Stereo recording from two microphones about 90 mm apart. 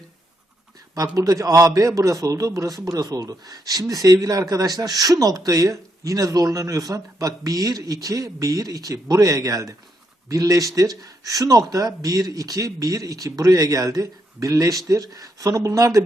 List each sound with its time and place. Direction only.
0.9 s a man's voice: 40° right (ahead or behind)